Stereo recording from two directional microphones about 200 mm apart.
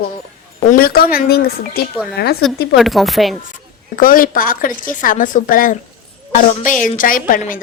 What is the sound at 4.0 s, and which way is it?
A woman's voice, 45° left (ahead or behind).